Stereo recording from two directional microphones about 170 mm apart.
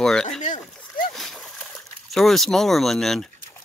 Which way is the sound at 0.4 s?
45° left (ahead or behind).